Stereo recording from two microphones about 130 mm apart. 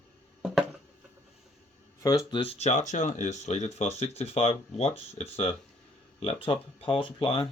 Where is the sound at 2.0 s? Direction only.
25° left (ahead or behind).